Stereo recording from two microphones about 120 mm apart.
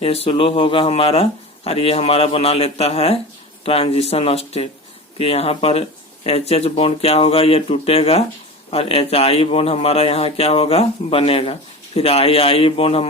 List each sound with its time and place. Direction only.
0.0 s a man's voice: 55° left (ahead or behind)